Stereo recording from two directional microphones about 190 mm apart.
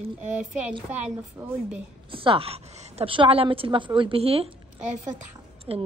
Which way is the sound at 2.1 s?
30° right (ahead or behind).